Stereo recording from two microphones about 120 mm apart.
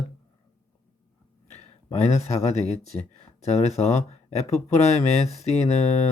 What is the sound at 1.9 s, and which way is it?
Speech, 65° left (ahead or behind).